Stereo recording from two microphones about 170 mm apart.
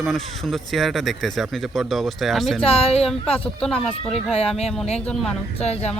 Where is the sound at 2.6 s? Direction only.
35° left (ahead or behind).